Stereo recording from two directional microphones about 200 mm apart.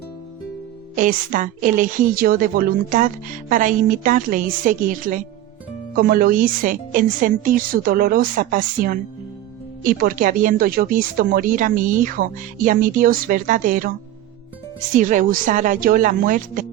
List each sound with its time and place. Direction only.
0.9 s a woman's voice: 40° right (ahead or behind)
14.9 s a woman's voice: 40° right (ahead or behind)